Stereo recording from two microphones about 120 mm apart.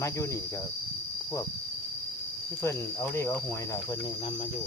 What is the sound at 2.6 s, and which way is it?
Speech, 20° left (ahead or behind).